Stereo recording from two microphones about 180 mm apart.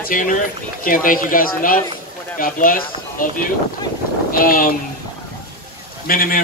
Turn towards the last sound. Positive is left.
turn(degrees=50)  # may be behind; listen again after turning